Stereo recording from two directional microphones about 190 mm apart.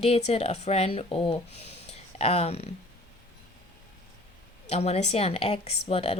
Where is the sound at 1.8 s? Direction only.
35° left (ahead or behind).